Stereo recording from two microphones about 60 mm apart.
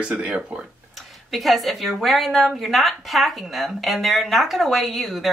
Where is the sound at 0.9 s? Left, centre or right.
Centre.